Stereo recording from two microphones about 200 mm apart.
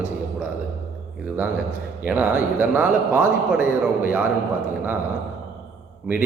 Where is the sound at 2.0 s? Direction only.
10° right (ahead or behind).